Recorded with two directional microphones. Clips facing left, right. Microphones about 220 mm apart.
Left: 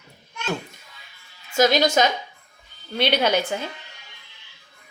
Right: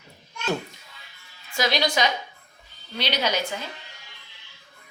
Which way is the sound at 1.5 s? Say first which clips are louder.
Left 6 dB; 45° left (ahead or behind).